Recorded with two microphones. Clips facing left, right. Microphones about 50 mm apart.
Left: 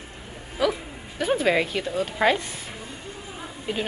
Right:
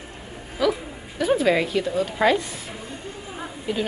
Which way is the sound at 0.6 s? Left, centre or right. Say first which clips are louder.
Right 2 dB; left.